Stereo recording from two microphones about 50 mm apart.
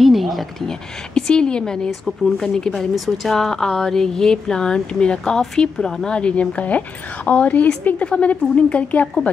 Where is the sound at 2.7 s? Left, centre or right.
Centre.